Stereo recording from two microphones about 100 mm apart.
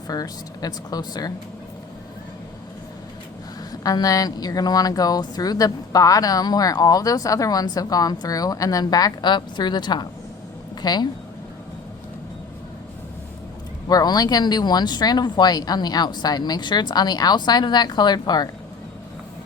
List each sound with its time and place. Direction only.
0.1 s speech: 40° left (ahead or behind)
3.7 s speech: 35° left (ahead or behind)
13.8 s speech: 40° left (ahead or behind)